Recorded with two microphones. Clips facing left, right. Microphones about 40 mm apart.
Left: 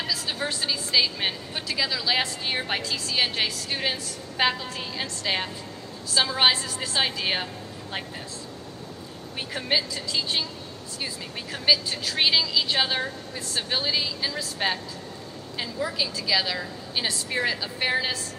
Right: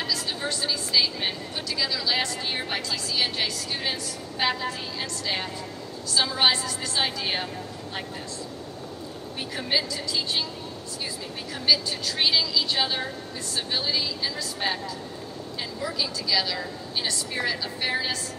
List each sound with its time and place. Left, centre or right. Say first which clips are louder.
0.0 s a woman's voice: even; centre
9.8 s speech: even; centre
11.6 s speech: left 1 dB; centre
15.8 s speech: left 1 dB; centre